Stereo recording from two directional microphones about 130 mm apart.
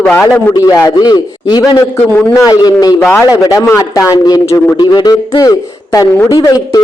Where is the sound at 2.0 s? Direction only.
15° left (ahead or behind).